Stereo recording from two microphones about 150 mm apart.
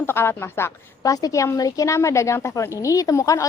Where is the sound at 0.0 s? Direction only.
15° left (ahead or behind).